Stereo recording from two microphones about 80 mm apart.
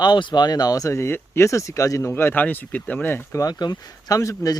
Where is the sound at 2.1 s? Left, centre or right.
Left.